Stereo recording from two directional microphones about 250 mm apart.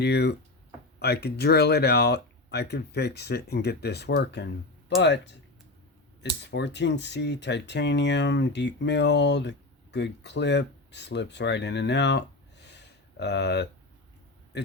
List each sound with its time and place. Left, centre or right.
0.0 s speech: left
6.4 s speech: left